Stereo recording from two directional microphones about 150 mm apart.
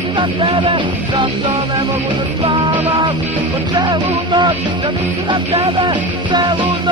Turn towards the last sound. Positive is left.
turn(degrees=-30)  # may be behind; listen again after turning